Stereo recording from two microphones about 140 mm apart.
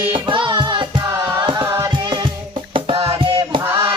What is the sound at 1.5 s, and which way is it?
Music, 20° right (ahead or behind).